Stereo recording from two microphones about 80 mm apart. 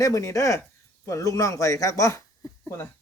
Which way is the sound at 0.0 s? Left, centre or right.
Left.